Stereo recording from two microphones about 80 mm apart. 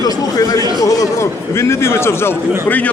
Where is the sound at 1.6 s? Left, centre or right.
Left.